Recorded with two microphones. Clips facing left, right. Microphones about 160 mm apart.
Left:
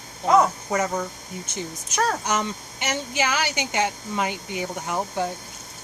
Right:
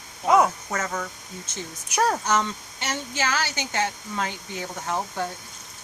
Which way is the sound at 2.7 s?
15° left (ahead or behind).